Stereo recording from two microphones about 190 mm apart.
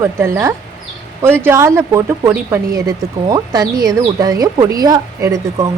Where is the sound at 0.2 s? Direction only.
15° right (ahead or behind).